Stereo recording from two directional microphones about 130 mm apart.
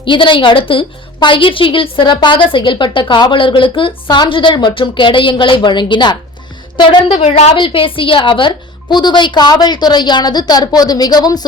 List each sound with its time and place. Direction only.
0.0 s a woman's voice: 40° left (ahead or behind)
7.2 s a woman's voice: 60° left (ahead or behind)
7.5 s a woman's voice: 40° left (ahead or behind)